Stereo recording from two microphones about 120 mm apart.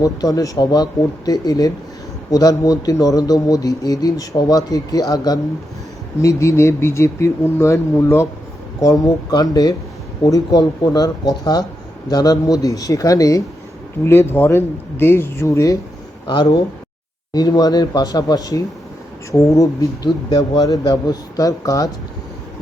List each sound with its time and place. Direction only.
0.0 s speech: 30° left (ahead or behind)
16.2 s speech: 40° left (ahead or behind)
20.1 s speech: 40° left (ahead or behind)